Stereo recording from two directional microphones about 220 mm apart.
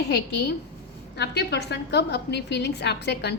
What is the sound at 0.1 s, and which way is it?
A woman's voice, 50° left (ahead or behind).